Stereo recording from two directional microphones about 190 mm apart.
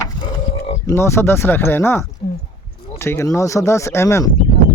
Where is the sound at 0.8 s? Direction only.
15° left (ahead or behind).